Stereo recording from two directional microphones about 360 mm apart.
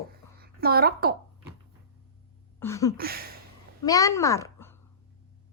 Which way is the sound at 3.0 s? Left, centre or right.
Right.